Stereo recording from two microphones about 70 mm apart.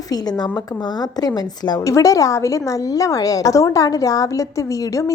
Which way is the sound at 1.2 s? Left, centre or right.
Left.